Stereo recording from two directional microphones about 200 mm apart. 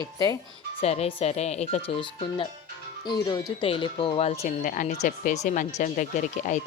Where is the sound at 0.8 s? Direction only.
30° left (ahead or behind).